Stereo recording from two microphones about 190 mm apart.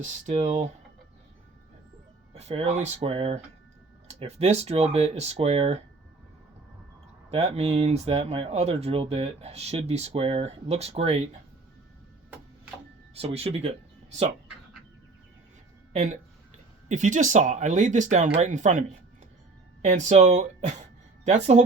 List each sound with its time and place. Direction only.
0.0 s speech: 40° right (ahead or behind)
2.3 s speech: 35° right (ahead or behind)
7.3 s speech: 35° right (ahead or behind)
13.1 s speech: 30° right (ahead or behind)
15.9 s speech: 40° right (ahead or behind)